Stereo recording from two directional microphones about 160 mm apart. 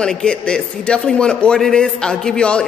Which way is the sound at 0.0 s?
5° left (ahead or behind).